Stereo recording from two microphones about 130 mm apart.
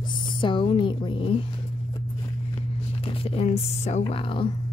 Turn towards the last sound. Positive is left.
turn(degrees=45)  # may be behind; listen again after turning